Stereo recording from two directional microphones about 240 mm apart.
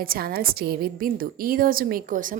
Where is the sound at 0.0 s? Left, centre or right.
Right.